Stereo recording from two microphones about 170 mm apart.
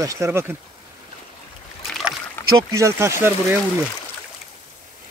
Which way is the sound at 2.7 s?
15° right (ahead or behind).